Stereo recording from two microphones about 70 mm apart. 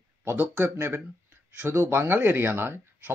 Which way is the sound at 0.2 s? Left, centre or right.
Right.